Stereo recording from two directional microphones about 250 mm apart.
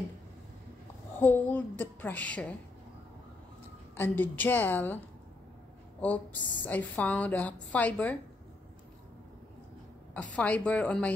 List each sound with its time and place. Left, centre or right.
1.2 s a woman's voice: centre
3.9 s a woman's voice: centre
10.3 s a woman's voice: centre